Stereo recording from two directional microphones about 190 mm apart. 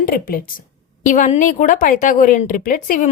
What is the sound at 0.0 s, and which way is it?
A woman's voice, 50° left (ahead or behind).